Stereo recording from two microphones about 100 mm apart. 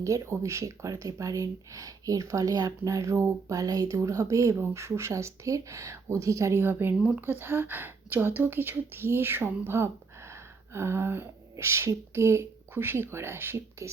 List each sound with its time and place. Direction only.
0.0 s speech: 30° right (ahead or behind)